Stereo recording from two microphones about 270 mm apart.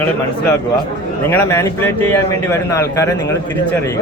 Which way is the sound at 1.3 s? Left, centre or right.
Centre.